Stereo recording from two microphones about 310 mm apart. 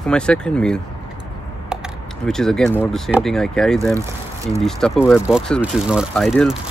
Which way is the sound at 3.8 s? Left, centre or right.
Centre.